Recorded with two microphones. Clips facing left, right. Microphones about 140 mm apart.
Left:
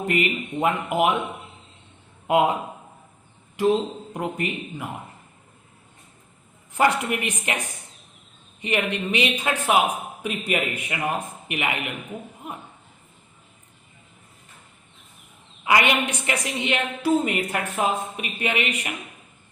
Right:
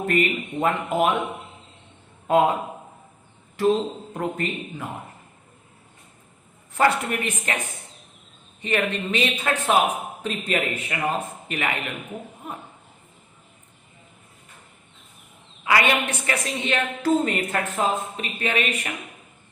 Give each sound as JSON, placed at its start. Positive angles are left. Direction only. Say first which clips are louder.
{"t": 0.0, "sound": "a woman's voice", "louder": "right 1 dB", "side_deg": 15}
{"t": 2.2, "sound": "a man's voice", "louder": "right 1 dB", "side_deg": 15}
{"t": 3.6, "sound": "a woman's voice", "louder": "even", "side_deg": 15}
{"t": 6.7, "sound": "a woman's voice", "louder": "even", "side_deg": 15}
{"t": 8.6, "sound": "a woman's voice", "louder": "even", "side_deg": 15}
{"t": 15.6, "sound": "a woman's voice", "louder": "even", "side_deg": 20}